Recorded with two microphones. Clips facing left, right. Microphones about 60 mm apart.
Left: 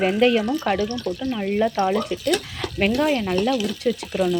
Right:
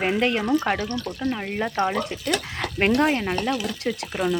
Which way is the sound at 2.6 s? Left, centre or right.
Right.